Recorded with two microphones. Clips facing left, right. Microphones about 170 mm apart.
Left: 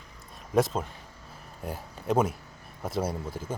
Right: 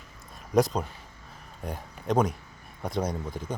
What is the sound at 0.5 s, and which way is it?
Speech, centre (ahead or behind).